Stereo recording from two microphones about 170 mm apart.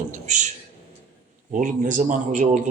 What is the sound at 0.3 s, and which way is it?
Speech, 45° right (ahead or behind).